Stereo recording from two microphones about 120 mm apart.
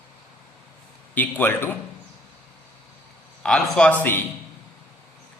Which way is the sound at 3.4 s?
5° left (ahead or behind).